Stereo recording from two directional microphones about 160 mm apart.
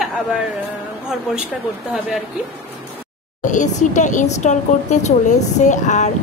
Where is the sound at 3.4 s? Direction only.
50° left (ahead or behind).